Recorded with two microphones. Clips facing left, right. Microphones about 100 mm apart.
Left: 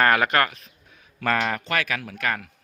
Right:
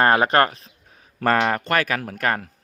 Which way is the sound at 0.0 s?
30° right (ahead or behind).